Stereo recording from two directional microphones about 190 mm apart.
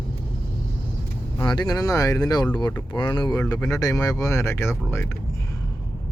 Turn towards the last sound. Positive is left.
turn(degrees=15)  # may be behind; listen again after turning